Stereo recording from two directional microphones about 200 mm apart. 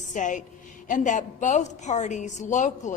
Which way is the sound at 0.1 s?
40° left (ahead or behind).